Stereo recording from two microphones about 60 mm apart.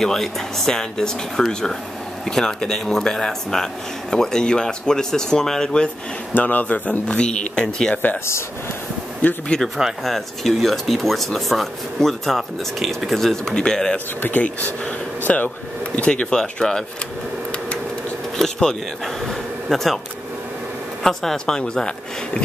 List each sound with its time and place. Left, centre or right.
0.0 s speech: centre
6.3 s speech: left
7.9 s speech: left
9.5 s speech: centre
10.0 s speech: centre
13.9 s speech: left
16.1 s speech: centre
18.4 s speech: centre
21.0 s speech: centre